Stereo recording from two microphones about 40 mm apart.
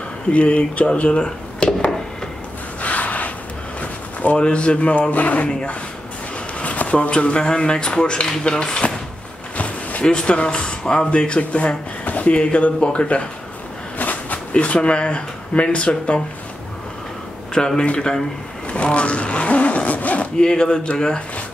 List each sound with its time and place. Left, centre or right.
0.3 s speech: left
1.6 s a sound: left
2.8 s gasp: left
3.8 s a sound: left
4.4 s speech: left
6.6 s speech: left
10.0 s speech: left
13.9 s a sound: left
14.5 s speech: left
17.6 s a man's voice: centre
18.7 s zipper: left
20.3 s speech: left